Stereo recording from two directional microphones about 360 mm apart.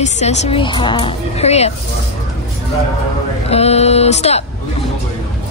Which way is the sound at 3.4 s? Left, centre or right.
Centre.